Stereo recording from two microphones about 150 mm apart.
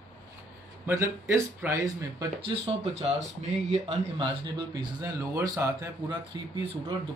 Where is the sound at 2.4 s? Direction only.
45° right (ahead or behind).